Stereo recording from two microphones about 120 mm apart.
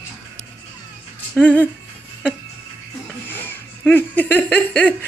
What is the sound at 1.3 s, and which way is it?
Speech, 10° left (ahead or behind).